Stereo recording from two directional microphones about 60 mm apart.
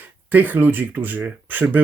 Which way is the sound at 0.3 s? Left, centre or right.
Right.